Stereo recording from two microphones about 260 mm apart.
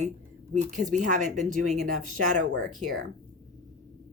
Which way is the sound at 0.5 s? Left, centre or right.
Right.